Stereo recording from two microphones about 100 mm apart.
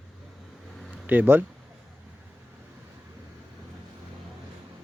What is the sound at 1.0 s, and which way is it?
Speech, 15° right (ahead or behind).